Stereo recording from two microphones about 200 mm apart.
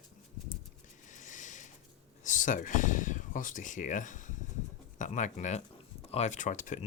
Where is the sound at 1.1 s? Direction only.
40° left (ahead or behind).